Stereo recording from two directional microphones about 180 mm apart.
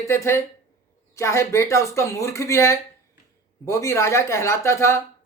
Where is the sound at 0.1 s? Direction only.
15° left (ahead or behind).